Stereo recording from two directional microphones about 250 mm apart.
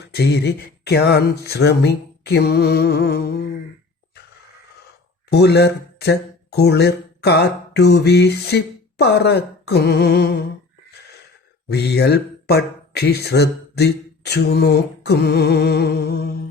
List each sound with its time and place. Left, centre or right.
0.0 s speech: left
5.3 s speech: left
11.7 s speech: left